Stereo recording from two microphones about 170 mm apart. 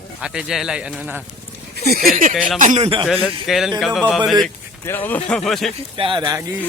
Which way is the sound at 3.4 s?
Centre (ahead or behind).